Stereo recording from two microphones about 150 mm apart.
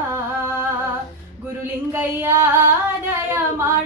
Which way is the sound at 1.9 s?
15° right (ahead or behind).